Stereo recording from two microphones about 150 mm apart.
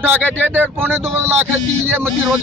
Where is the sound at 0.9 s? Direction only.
15° right (ahead or behind).